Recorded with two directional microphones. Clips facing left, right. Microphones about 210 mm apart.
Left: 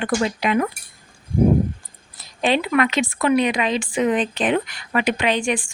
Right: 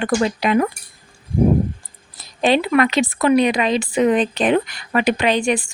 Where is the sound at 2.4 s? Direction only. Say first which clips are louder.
Right 3 dB; 35° right (ahead or behind).